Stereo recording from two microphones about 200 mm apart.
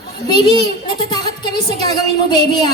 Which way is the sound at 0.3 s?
20° left (ahead or behind).